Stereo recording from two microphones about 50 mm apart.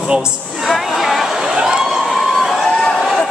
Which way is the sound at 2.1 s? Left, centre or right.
Centre.